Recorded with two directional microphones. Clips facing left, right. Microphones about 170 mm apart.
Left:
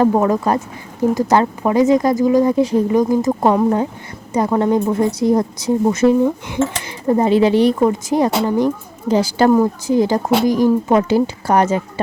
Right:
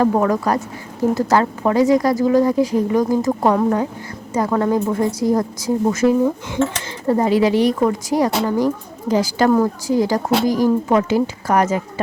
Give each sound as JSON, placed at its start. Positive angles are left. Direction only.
{"t": 0.1, "sound": "speech", "side_deg": 25}
{"t": 9.5, "sound": "speech", "side_deg": 15}